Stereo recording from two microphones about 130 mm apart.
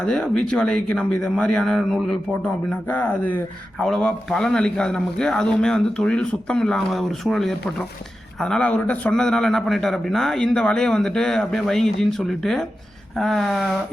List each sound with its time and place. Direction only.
0.0 s speech: 5° left (ahead or behind)